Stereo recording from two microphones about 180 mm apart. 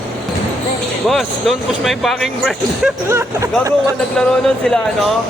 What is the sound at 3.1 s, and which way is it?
Speech, 15° right (ahead or behind).